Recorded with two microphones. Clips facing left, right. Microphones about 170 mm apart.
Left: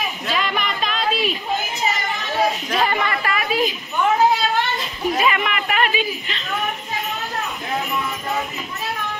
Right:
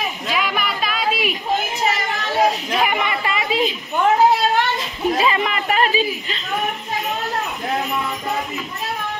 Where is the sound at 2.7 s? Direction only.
10° right (ahead or behind).